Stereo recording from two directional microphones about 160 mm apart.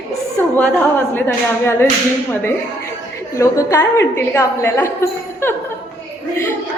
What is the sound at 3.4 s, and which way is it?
A woman's voice, 15° left (ahead or behind).